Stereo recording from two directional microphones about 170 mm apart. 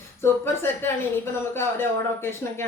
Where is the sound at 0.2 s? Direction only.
15° left (ahead or behind).